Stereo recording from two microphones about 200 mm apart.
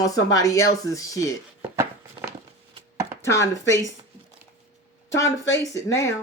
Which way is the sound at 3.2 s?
15° left (ahead or behind).